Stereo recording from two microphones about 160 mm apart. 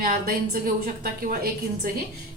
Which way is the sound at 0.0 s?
65° right (ahead or behind).